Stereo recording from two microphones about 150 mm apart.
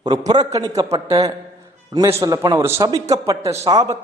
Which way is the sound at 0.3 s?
25° right (ahead or behind).